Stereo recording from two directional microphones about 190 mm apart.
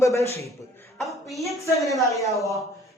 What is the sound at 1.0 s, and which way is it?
Speech, centre (ahead or behind).